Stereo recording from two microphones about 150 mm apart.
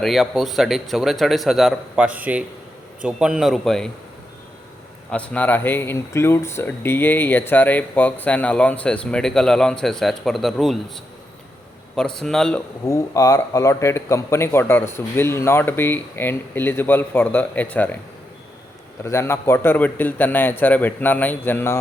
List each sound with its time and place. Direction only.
0.0 s a man's voice: centre (ahead or behind)
5.1 s a man's voice: 10° left (ahead or behind)
12.8 s speech: 20° left (ahead or behind)
19.0 s speech: 20° left (ahead or behind)